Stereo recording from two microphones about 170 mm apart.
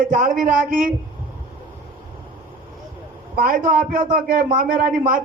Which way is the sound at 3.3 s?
55° right (ahead or behind).